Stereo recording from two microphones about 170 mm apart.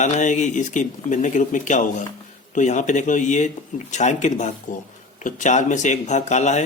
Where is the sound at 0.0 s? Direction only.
45° left (ahead or behind).